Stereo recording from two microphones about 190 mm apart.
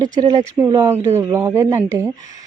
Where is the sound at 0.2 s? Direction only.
20° right (ahead or behind).